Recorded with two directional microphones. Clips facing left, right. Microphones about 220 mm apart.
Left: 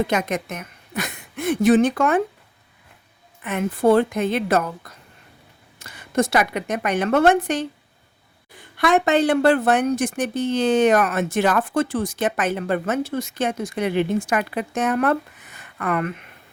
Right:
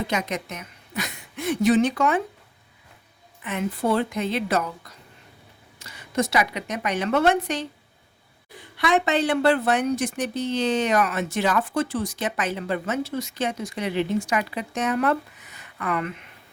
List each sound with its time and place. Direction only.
0.1 s a woman's voice: 50° left (ahead or behind)
3.4 s a woman's voice: 50° left (ahead or behind)
8.8 s a woman's voice: 50° left (ahead or behind)